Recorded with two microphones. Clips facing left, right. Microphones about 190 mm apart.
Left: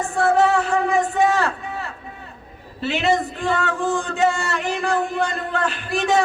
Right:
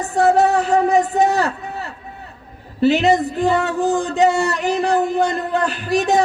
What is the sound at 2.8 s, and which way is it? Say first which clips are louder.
A man's voice: right 6 dB; 40° right (ahead or behind).